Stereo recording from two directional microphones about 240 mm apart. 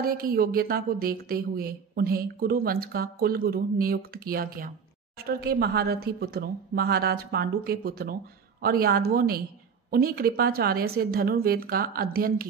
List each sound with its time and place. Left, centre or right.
0.0 s speech: right